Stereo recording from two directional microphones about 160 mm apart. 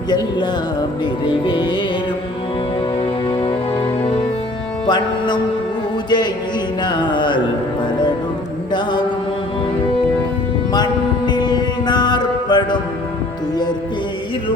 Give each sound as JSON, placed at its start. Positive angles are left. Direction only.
{"t": 0.1, "sound": "music", "side_deg": 25}
{"t": 3.0, "sound": "music", "side_deg": 35}
{"t": 8.7, "sound": "music", "side_deg": 30}
{"t": 11.3, "sound": "music", "side_deg": 25}